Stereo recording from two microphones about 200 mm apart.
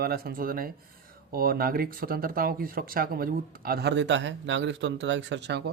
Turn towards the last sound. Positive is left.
turn(degrees=-60)  # may be behind; listen again after turning